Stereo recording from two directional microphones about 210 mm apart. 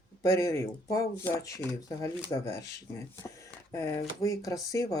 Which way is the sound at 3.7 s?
15° left (ahead or behind).